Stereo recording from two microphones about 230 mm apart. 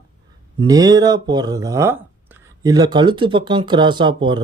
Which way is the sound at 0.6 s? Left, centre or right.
Centre.